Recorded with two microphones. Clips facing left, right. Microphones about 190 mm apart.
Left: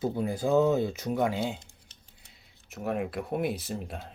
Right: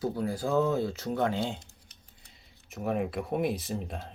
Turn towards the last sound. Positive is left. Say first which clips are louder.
# right 1 dB
turn(degrees=0)  # may be behind; listen again after turning